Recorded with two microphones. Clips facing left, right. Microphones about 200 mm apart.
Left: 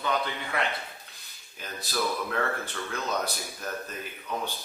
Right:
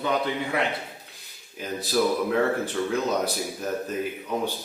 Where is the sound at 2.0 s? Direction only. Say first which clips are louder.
Right 7 dB; 20° right (ahead or behind).